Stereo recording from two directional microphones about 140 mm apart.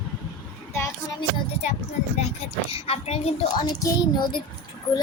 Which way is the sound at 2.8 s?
45° left (ahead or behind).